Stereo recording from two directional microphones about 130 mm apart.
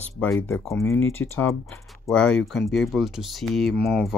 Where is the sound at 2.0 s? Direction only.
5° left (ahead or behind).